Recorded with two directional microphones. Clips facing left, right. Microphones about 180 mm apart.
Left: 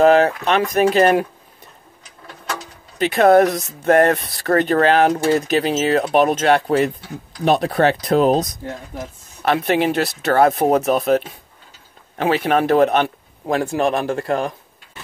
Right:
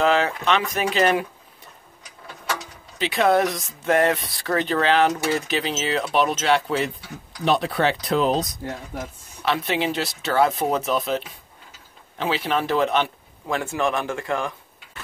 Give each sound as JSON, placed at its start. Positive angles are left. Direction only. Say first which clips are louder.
{"t": 0.0, "sound": "speech", "louder": "left 7 dB", "side_deg": 45}
{"t": 3.0, "sound": "speech", "louder": "left 7 dB", "side_deg": 50}
{"t": 9.4, "sound": "speech", "louder": "left 6 dB", "side_deg": 55}